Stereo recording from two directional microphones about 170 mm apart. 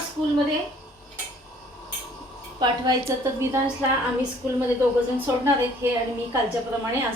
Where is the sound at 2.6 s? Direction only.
20° right (ahead or behind).